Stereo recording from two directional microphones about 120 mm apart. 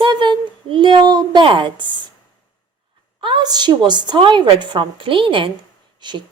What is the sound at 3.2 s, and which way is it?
Speech, 45° right (ahead or behind).